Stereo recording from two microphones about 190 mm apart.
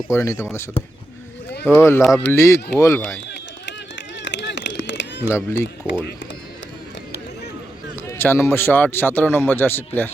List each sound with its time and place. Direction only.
0.1 s speech: 15° left (ahead or behind)
1.6 s speech: 10° left (ahead or behind)
4.2 s a sound: 70° left (ahead or behind)
5.5 s speech: 65° left (ahead or behind)
8.0 s speech: 10° left (ahead or behind)